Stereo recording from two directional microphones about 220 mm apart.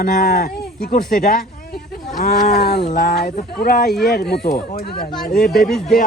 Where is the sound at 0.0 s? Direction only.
45° left (ahead or behind).